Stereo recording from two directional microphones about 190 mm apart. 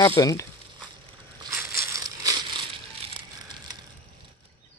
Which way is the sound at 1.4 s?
15° right (ahead or behind).